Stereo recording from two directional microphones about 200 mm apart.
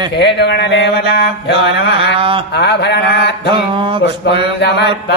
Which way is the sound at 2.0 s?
25° right (ahead or behind).